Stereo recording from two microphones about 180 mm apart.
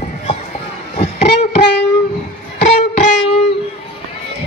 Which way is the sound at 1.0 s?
35° left (ahead or behind).